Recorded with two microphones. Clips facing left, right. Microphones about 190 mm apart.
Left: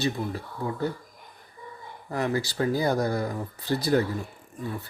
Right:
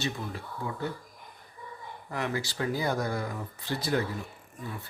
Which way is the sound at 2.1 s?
40° left (ahead or behind).